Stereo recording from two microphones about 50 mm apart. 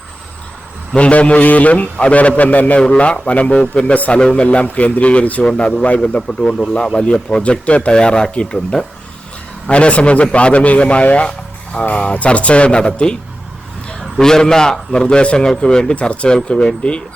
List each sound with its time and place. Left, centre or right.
0.9 s a man's voice: left
2.8 s a man's voice: left
4.2 s a man's voice: centre
9.6 s a man's voice: left